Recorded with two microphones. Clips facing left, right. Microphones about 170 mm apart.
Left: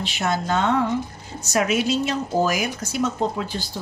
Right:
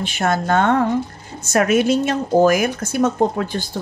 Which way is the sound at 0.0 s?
50° right (ahead or behind).